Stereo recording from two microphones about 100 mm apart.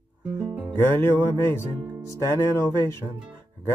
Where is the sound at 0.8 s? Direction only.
20° left (ahead or behind).